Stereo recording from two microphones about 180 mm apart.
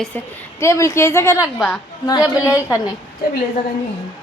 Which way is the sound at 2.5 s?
15° left (ahead or behind).